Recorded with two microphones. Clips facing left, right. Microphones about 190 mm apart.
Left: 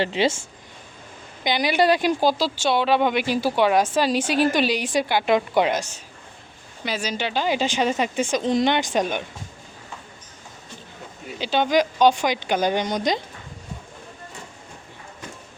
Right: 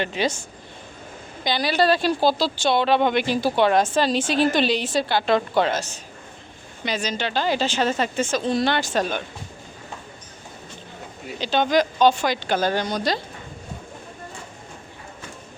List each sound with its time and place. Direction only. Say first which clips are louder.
0.0 s speech: left 3 dB; 25° left (ahead or behind)
1.5 s speech: left 1 dB; 20° left (ahead or behind)
11.3 s speech: even; 10° left (ahead or behind)